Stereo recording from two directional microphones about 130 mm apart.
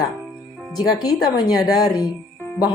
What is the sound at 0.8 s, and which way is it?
A woman's voice, 30° left (ahead or behind).